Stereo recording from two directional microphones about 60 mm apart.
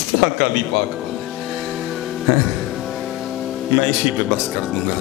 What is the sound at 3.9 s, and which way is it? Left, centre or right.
Music, centre.